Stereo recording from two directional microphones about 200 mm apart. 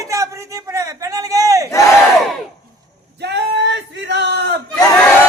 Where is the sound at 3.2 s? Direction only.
60° right (ahead or behind).